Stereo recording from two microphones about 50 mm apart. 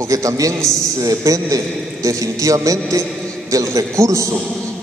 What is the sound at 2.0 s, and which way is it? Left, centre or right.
A man's voice, right.